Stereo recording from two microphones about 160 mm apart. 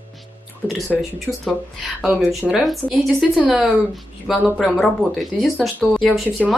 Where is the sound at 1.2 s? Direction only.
Centre (ahead or behind).